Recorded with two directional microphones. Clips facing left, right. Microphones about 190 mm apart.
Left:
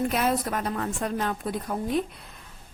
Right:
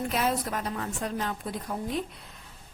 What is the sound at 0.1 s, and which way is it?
A woman's voice, 55° left (ahead or behind).